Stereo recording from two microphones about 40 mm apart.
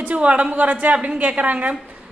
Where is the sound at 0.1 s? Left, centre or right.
Right.